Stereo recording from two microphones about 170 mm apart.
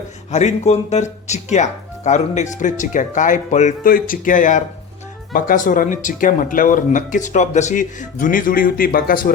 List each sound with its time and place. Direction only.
0.3 s speech: 40° left (ahead or behind)